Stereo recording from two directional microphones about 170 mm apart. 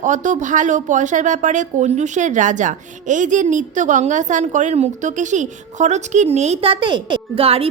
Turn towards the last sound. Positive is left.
turn(degrees=-35)  # may be behind; listen again after turning